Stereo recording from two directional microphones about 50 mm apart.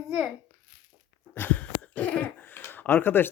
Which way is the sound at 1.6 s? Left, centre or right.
Left.